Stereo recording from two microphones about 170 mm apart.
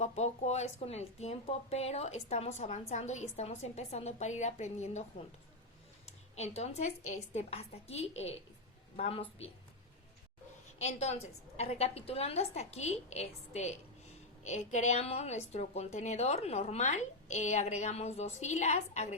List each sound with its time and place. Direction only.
0.0 s speech: 40° left (ahead or behind)
10.8 s speech: 40° left (ahead or behind)